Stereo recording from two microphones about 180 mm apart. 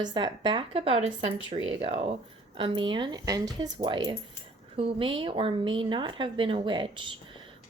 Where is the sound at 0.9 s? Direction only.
90° right.